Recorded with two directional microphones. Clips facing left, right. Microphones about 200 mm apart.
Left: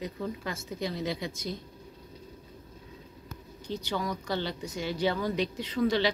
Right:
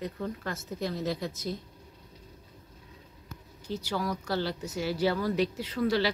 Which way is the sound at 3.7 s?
5° right (ahead or behind).